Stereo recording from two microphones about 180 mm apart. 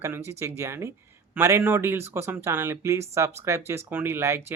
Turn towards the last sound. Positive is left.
turn(degrees=-15)  # may be behind; listen again after turning